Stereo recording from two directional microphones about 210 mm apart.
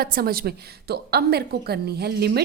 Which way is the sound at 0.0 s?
45° right (ahead or behind).